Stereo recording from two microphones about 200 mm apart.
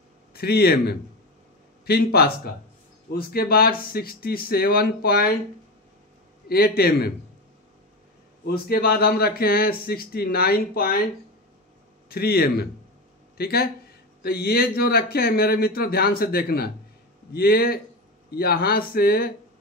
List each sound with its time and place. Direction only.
0.3 s speech: 50° left (ahead or behind)
2.1 s speech: 50° left (ahead or behind)
6.5 s speech: 50° left (ahead or behind)
8.5 s speech: 50° left (ahead or behind)
12.1 s speech: 50° left (ahead or behind)